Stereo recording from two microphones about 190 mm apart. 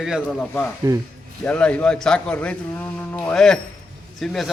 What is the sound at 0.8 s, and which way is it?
Speech, 15° right (ahead or behind).